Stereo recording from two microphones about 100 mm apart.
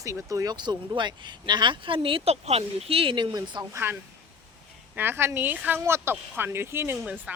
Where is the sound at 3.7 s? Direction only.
20° right (ahead or behind).